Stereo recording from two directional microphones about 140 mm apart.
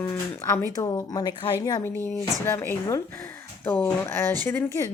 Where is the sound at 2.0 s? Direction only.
15° left (ahead or behind).